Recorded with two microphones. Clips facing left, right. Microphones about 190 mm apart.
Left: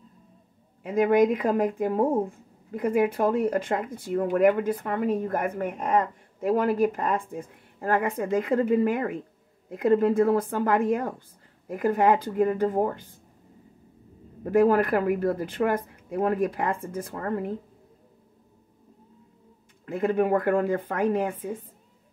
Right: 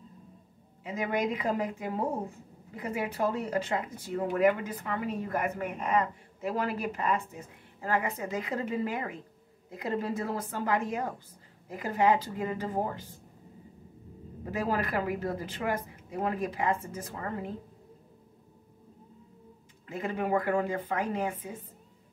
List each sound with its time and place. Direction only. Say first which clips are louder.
0.8 s speech: left 10 dB; 55° left (ahead or behind)
14.4 s speech: left 11 dB; 55° left (ahead or behind)
19.9 s speech: left 7 dB; 55° left (ahead or behind)